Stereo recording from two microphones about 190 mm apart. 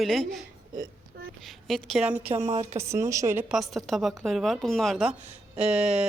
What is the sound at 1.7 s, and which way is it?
Speech, centre (ahead or behind).